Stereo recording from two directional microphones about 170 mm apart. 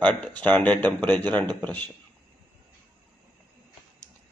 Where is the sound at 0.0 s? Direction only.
10° left (ahead or behind).